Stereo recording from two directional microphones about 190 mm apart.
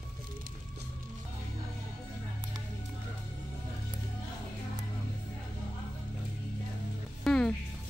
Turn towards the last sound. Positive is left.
turn(degrees=5)  # may be behind; listen again after turning